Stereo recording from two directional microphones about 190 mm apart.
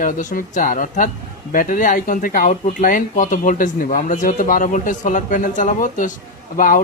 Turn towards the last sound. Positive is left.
turn(degrees=45)  # may be behind; listen again after turning